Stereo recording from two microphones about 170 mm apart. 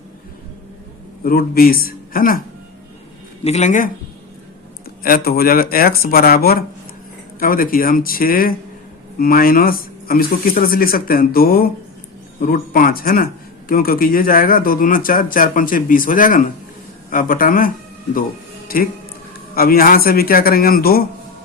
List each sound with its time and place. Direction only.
1.2 s a man's voice: 60° left (ahead or behind)
3.4 s speech: 40° left (ahead or behind)
5.0 s speech: 60° left (ahead or behind)
18.7 s speech: 60° left (ahead or behind)